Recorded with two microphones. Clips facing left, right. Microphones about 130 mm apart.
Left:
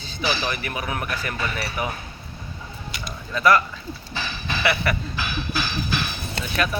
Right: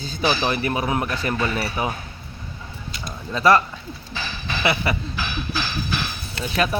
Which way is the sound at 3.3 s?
30° right (ahead or behind).